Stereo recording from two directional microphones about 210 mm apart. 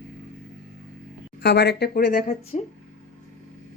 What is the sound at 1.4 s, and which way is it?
Speech, 55° left (ahead or behind).